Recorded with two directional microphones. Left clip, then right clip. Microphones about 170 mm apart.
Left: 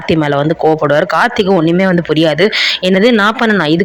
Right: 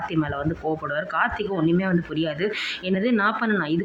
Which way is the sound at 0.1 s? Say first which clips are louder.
Left 14 dB; 30° left (ahead or behind).